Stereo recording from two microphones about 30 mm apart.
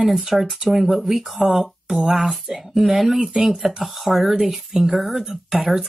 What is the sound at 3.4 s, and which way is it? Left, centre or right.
Speech, right.